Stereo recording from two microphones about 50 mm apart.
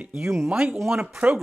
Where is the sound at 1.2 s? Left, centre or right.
Right.